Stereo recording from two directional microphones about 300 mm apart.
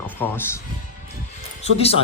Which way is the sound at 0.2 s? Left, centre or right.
Centre.